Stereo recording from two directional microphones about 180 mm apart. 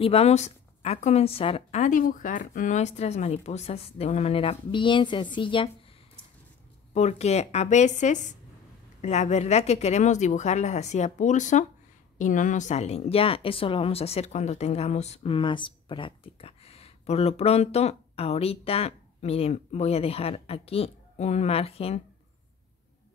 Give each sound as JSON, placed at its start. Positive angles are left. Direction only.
{"t": 0.0, "sound": "a woman's voice", "side_deg": 35}
{"t": 6.9, "sound": "a woman's voice", "side_deg": 40}